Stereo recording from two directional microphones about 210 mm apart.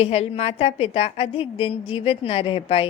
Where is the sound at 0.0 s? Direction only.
30° left (ahead or behind).